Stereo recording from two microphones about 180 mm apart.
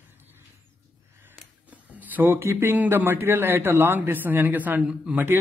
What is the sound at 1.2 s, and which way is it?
Speech, 10° right (ahead or behind).